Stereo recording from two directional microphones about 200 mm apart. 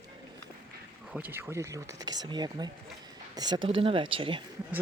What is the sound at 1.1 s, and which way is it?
Speech, 10° right (ahead or behind).